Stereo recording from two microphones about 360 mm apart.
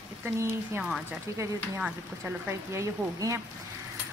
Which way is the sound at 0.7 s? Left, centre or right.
Centre.